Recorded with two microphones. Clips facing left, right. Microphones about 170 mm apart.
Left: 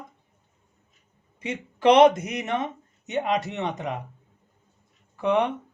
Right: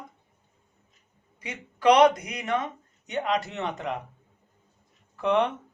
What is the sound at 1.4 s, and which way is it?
Speech, 25° left (ahead or behind).